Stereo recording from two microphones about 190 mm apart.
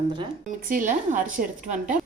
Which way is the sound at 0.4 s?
40° right (ahead or behind).